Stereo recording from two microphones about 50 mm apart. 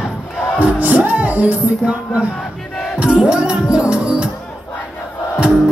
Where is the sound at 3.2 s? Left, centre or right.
Centre.